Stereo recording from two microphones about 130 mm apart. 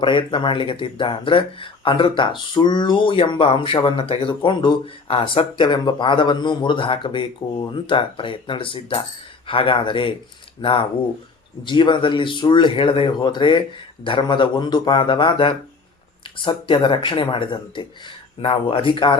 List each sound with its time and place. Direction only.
0.0 s speech: 40° left (ahead or behind)